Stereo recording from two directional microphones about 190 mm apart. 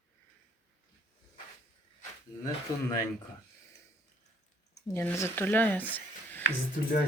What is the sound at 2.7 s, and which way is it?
Speech, 20° left (ahead or behind).